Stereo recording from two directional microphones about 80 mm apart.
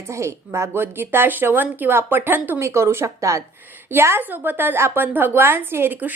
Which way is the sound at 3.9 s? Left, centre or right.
Right.